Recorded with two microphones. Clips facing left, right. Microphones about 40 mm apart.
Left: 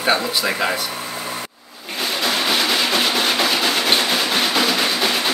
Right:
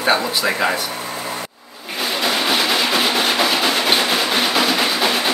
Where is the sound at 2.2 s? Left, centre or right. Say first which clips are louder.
Right 1 dB; centre.